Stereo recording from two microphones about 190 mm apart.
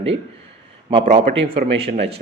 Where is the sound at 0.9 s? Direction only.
35° right (ahead or behind).